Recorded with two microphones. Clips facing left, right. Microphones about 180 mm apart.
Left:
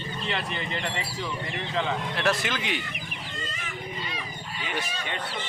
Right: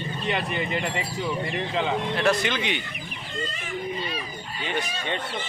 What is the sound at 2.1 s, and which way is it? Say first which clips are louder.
Speech: right 4 dB; centre (ahead or behind).